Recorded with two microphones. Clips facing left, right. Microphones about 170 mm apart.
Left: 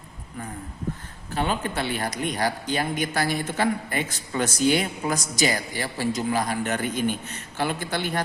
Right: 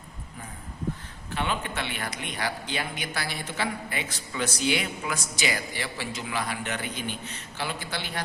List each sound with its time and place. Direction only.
1.3 s a man's voice: 40° left (ahead or behind)